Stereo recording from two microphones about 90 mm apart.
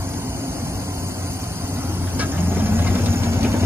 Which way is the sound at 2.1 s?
25° right (ahead or behind).